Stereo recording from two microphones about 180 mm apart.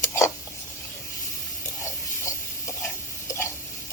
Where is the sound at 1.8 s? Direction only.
15° left (ahead or behind).